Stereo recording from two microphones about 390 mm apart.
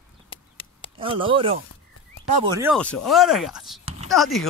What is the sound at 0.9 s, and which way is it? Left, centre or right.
Speech, centre.